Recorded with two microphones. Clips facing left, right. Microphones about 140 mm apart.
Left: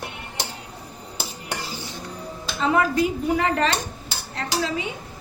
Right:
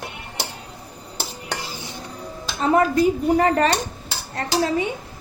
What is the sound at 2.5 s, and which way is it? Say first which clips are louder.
Speech: right 3 dB; 40° right (ahead or behind).